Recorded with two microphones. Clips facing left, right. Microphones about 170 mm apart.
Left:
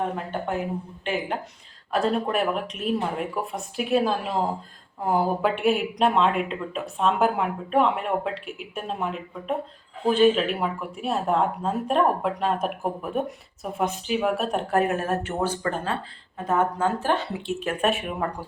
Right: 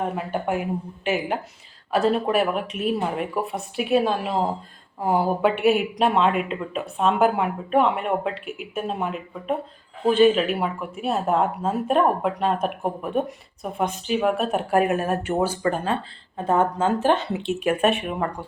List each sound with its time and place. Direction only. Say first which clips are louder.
0.2 s speech: right 3 dB; 10° right (ahead or behind)
16.5 s speech: right 3 dB; 25° right (ahead or behind); by 18.4 s centre (ahead or behind)